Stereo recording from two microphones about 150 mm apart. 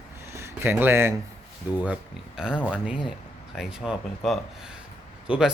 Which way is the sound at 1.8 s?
5° right (ahead or behind).